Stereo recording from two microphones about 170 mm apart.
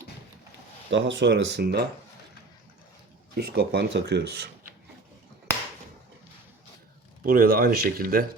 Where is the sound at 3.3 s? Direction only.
75° right (ahead or behind).